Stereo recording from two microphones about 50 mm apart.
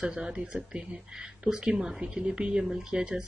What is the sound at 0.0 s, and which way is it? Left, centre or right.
Speech, centre.